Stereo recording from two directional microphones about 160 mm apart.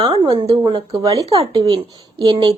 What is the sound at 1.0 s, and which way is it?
Speech, 20° right (ahead or behind).